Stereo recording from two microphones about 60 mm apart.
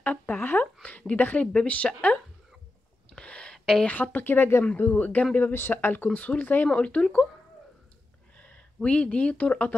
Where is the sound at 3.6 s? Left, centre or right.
Centre.